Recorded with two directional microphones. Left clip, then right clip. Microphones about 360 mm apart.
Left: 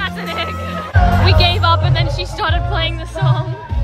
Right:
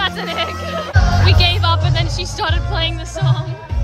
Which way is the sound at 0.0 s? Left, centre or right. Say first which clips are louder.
Right 2 dB; centre.